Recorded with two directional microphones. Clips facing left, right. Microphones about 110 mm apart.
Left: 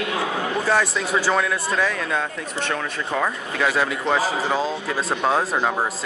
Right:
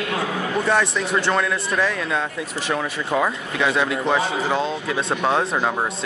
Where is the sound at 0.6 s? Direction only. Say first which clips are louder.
Right 1 dB; centre (ahead or behind).